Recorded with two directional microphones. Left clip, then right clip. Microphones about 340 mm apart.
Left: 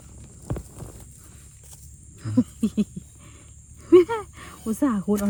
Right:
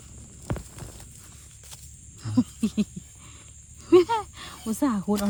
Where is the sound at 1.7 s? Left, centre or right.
Centre.